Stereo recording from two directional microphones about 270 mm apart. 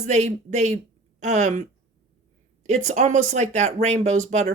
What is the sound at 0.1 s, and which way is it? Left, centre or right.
A woman's voice, right.